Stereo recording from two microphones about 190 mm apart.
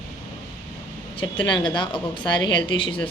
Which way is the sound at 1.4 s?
25° left (ahead or behind).